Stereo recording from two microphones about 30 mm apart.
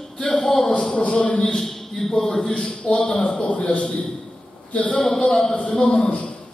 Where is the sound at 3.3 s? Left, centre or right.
Left.